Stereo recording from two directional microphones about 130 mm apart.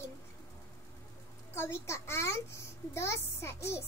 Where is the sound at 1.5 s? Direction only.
20° left (ahead or behind).